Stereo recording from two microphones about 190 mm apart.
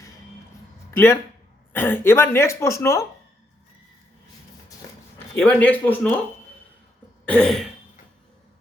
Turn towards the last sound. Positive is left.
turn(degrees=5)  # may be behind; listen again after turning